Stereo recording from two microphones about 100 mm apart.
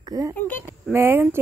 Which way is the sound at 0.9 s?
20° right (ahead or behind).